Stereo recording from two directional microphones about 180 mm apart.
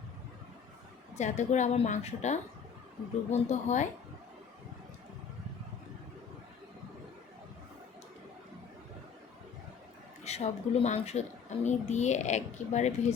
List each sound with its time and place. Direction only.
1.1 s speech: 40° left (ahead or behind)
10.2 s speech: 35° left (ahead or behind)